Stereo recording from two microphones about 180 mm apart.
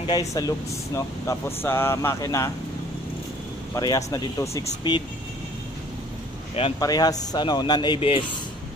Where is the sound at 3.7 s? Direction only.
20° left (ahead or behind).